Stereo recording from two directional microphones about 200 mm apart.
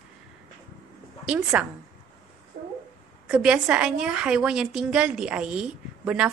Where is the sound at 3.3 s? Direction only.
5° right (ahead or behind).